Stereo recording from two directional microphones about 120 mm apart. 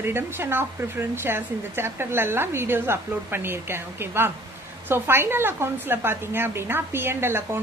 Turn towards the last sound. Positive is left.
turn(degrees=-20)  # may be behind; listen again after turning